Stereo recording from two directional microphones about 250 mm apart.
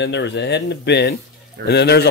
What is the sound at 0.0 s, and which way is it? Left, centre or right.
Speech, left.